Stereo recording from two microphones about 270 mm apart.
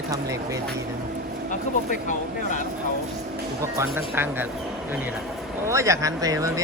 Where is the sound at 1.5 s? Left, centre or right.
Left.